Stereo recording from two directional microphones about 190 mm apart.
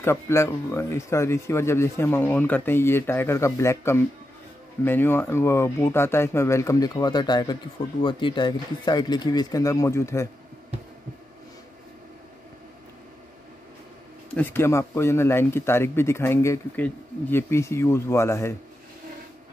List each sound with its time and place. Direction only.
0.0 s speech: 15° left (ahead or behind)
14.3 s speech: 10° left (ahead or behind)